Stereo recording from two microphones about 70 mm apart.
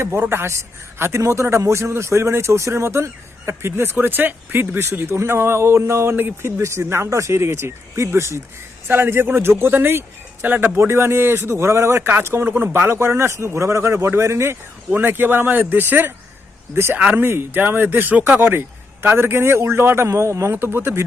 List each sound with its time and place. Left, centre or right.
0.0 s a man's voice: right
6.1 s speech: right
6.6 s a man's voice: right
10.8 s a man's voice: right
14.9 s a man's voice: right